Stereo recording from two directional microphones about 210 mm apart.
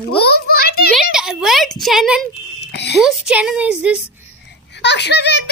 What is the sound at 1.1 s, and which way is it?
Speech, centre (ahead or behind).